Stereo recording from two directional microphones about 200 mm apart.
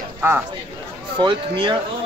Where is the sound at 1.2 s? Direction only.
25° right (ahead or behind).